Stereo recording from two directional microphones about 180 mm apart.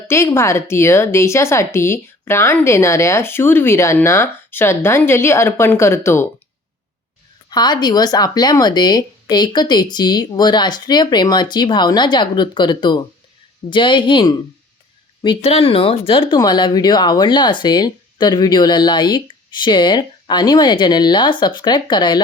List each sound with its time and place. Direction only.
0.1 s speech: 15° left (ahead or behind)
7.5 s speech: 25° left (ahead or behind)